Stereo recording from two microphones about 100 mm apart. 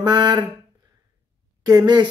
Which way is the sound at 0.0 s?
45° right (ahead or behind).